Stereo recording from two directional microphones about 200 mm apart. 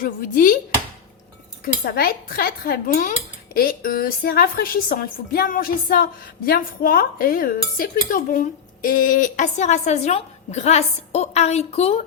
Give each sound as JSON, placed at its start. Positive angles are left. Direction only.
{"t": 0.0, "sound": "speech", "side_deg": 45}
{"t": 1.6, "sound": "speech", "side_deg": 50}